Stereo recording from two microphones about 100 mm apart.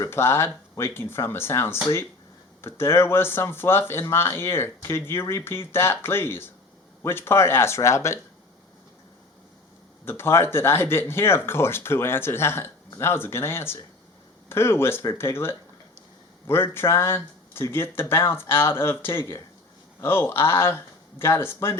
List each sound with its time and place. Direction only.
0.0 s speech: 25° left (ahead or behind)
10.1 s speech: 25° left (ahead or behind)